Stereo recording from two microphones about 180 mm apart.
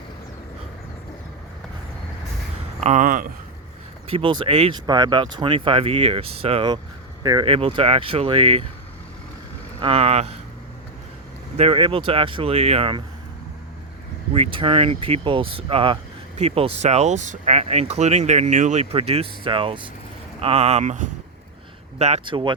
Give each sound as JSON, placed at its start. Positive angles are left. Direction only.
{"t": 2.8, "sound": "speech", "side_deg": -45}
{"t": 4.1, "sound": "speech", "side_deg": -30}
{"t": 9.8, "sound": "speech", "side_deg": -35}
{"t": 11.5, "sound": "speech", "side_deg": -30}
{"t": 14.3, "sound": "speech", "side_deg": -30}